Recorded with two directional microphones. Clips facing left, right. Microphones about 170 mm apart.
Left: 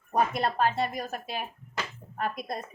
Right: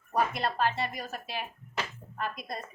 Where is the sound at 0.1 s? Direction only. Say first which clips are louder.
Left 3 dB; 50° left (ahead or behind).